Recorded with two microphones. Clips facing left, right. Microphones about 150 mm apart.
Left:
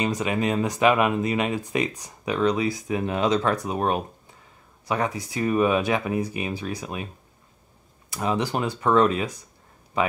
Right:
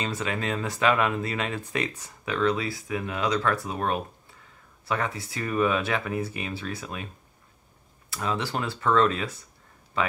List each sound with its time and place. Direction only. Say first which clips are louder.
0.0 s speech: left 5 dB; 15° left (ahead or behind)
8.1 s speech: left 4 dB; 15° left (ahead or behind)